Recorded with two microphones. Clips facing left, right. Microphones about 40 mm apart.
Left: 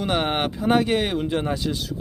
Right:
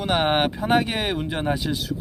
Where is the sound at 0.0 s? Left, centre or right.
Centre.